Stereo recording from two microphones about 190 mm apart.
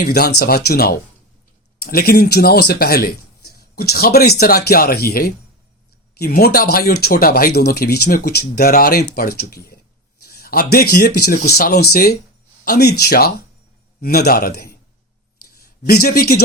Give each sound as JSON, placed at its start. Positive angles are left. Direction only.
{"t": 0.0, "sound": "speech", "side_deg": 55}